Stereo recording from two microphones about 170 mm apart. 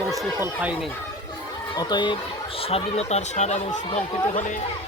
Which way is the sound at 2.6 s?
40° left (ahead or behind).